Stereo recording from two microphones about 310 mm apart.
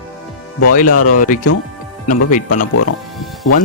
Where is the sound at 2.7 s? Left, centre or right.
Left.